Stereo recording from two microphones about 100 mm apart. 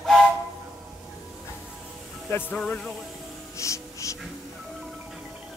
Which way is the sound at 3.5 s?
30° left (ahead or behind).